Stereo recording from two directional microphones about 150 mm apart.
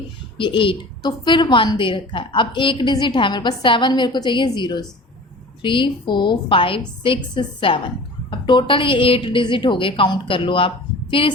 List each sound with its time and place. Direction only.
0.3 s a woman's voice: 35° left (ahead or behind)